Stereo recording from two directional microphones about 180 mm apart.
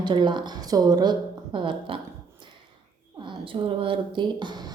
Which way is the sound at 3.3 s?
30° right (ahead or behind).